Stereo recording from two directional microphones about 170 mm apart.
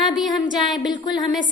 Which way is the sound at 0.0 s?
Centre (ahead or behind).